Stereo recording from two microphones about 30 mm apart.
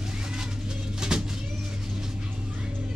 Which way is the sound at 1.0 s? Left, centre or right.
Right.